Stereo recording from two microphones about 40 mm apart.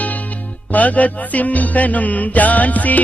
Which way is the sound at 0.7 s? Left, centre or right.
Left.